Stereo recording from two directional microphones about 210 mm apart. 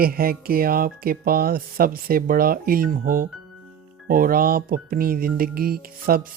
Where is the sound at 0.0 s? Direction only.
45° right (ahead or behind).